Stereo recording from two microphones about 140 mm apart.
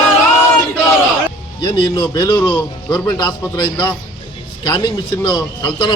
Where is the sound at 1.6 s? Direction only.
35° left (ahead or behind).